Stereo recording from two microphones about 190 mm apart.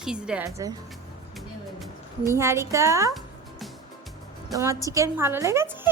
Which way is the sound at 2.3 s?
15° right (ahead or behind).